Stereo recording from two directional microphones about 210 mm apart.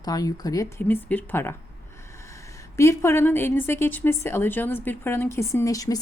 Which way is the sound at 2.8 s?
15° left (ahead or behind).